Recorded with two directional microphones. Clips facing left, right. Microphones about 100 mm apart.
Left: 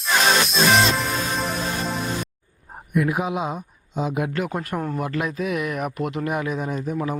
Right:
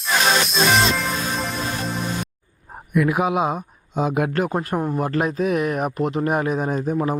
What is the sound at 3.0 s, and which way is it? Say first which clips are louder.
Speech: right 6 dB; 80° right.